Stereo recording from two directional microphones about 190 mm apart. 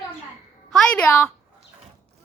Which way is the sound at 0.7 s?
5° left (ahead or behind).